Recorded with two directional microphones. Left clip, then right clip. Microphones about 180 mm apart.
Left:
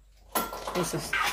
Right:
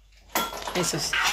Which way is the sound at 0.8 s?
5° right (ahead or behind).